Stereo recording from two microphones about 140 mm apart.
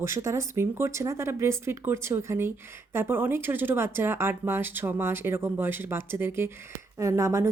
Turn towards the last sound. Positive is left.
turn(degrees=-20)  # may be behind; listen again after turning